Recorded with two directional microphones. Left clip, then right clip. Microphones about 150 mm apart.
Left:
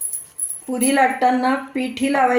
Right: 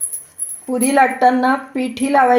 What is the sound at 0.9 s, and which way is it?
A woman's voice, 50° right (ahead or behind).